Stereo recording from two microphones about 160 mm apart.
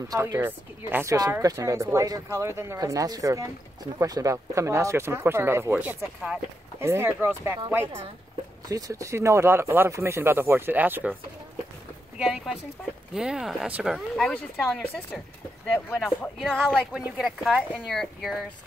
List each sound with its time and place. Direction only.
0.1 s speech: 25° right (ahead or behind)
0.4 s speech: 10° right (ahead or behind)
8.6 s speech: 20° right (ahead or behind)
12.2 s speech: 5° right (ahead or behind)